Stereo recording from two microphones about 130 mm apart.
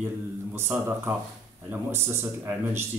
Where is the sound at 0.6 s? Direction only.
15° right (ahead or behind).